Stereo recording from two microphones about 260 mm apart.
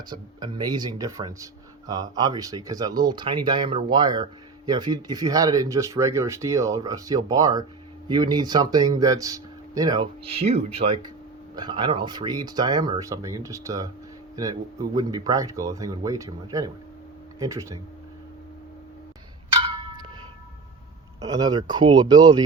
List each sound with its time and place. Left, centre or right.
0.1 s speech: centre
19.6 s clock: centre
21.2 s speech: centre